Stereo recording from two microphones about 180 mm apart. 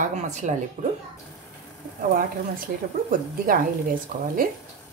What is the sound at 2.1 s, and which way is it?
A woman's voice, 50° right (ahead or behind).